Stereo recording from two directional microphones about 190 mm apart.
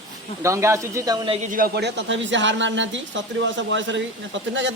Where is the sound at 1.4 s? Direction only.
50° right (ahead or behind).